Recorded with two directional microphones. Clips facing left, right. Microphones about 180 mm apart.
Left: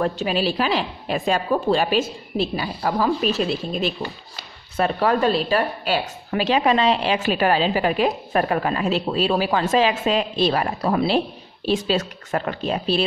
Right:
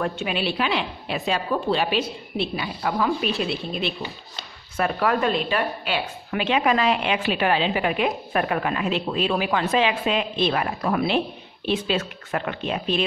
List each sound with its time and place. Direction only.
0.0 s speech: 40° left (ahead or behind)